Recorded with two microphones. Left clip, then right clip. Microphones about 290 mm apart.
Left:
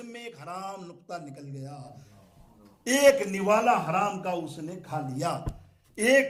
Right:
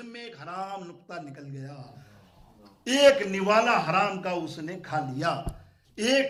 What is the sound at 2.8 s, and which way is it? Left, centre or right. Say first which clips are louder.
A man's voice: right 1 dB; centre.